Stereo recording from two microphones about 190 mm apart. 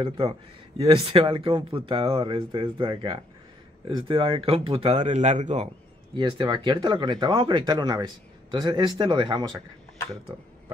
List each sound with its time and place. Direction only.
0.7 s speech: 25° right (ahead or behind)
6.1 s speech: 25° right (ahead or behind)